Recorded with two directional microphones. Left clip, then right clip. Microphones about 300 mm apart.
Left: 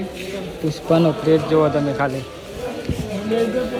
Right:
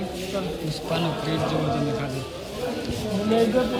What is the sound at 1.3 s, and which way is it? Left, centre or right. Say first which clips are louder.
Speech: left 12 dB; centre.